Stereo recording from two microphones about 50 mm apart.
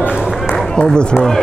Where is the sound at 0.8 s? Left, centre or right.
Centre.